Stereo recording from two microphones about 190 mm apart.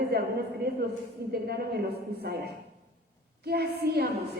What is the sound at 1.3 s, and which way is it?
Speech, 55° right (ahead or behind).